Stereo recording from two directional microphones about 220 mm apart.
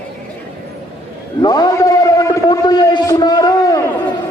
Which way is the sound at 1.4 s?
15° left (ahead or behind).